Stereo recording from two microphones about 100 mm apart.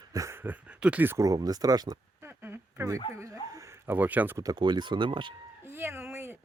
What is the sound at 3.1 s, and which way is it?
Speech, 30° right (ahead or behind).